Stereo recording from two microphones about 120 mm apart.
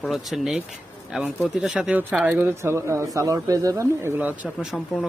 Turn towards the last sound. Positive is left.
turn(degrees=5)  # may be behind; listen again after turning